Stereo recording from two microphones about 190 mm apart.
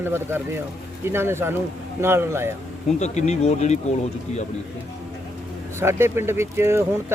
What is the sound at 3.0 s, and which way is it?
Speech, 35° left (ahead or behind).